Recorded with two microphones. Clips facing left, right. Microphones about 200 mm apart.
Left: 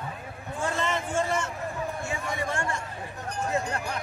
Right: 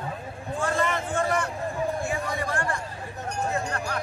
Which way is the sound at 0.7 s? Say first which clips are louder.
Even; 25° left (ahead or behind).